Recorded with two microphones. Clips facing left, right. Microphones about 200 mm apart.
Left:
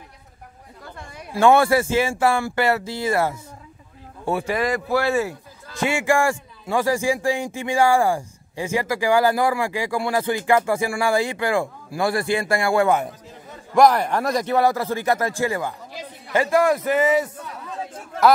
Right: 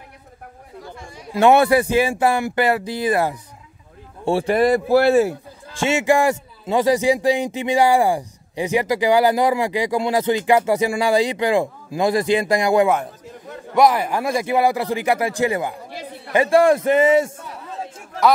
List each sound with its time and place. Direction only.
0.9 s a sound: 60° left (ahead or behind)
1.3 s speech: 20° right (ahead or behind)
4.2 s speech: 30° right (ahead or behind)
13.7 s a man's voice: 5° right (ahead or behind)
16.4 s a man's voice: 30° right (ahead or behind)